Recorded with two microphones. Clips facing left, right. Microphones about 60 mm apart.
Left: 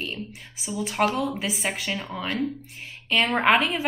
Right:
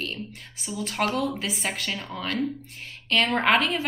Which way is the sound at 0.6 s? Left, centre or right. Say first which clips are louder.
Left 3 dB; centre.